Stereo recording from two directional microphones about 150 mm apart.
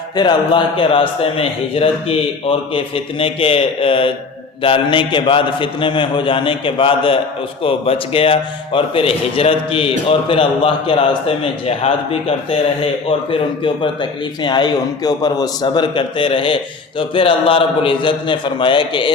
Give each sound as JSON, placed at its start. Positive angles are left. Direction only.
{"t": 0.2, "sound": "a man's voice", "side_deg": 30}